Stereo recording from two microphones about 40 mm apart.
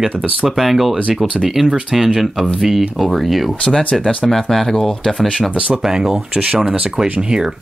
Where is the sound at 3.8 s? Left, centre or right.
Left.